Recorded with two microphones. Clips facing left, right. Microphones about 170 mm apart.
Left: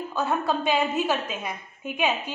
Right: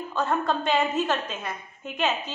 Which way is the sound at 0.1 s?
5° left (ahead or behind).